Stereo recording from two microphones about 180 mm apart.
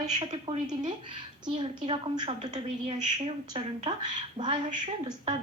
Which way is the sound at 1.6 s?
30° right (ahead or behind).